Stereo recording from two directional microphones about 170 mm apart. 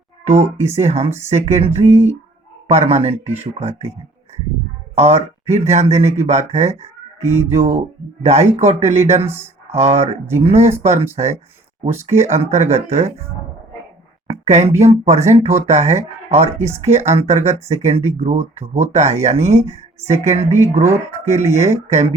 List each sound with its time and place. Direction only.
0.3 s speech: 15° right (ahead or behind)
0.8 s speech: 40° right (ahead or behind)
4.9 s speech: 40° right (ahead or behind)
7.2 s speech: 15° right (ahead or behind)
7.5 s speech: 35° right (ahead or behind)
14.3 s a sound: 40° right (ahead or behind)
14.8 s speech: 40° right (ahead or behind)
16.6 s speech: 15° right (ahead or behind)
16.8 s speech: 40° right (ahead or behind)